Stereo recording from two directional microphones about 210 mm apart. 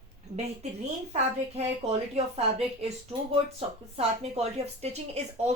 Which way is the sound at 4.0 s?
30° right (ahead or behind).